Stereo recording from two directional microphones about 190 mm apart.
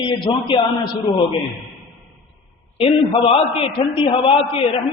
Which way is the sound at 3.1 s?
30° left (ahead or behind).